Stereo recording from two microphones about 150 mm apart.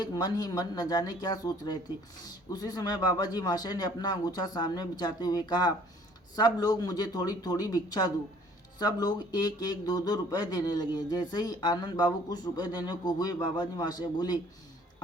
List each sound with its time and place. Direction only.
0.0 s speech: 30° left (ahead or behind)